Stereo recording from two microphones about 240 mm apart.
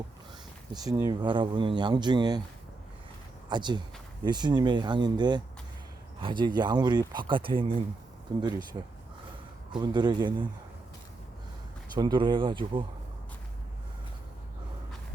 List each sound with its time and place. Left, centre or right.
0.9 s speech: centre
3.5 s speech: centre
9.7 s speech: centre
11.9 s speech: centre